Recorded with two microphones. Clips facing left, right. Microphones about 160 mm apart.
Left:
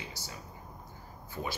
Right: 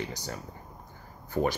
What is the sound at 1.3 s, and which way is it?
Speech, 60° right (ahead or behind).